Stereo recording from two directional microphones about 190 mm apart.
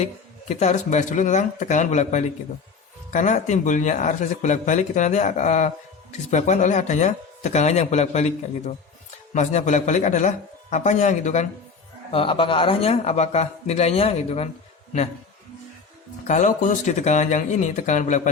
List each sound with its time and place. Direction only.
0.0 s speech: 35° left (ahead or behind)
12.1 s speech: 30° left (ahead or behind)
16.2 s speech: 40° left (ahead or behind)